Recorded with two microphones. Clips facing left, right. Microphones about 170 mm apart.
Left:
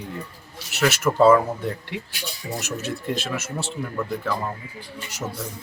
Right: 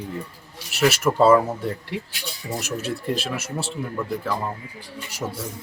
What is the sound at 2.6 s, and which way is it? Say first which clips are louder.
Speech: right 2 dB; 30° right (ahead or behind).